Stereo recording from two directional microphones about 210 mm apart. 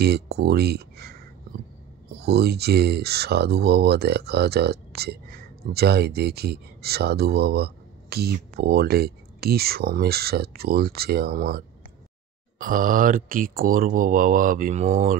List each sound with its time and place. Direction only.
0.0 s speech: 50° right (ahead or behind)
2.2 s speech: 50° right (ahead or behind); by 15.1 s 35° right (ahead or behind)